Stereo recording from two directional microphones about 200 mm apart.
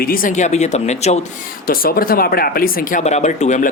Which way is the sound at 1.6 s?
45° left (ahead or behind).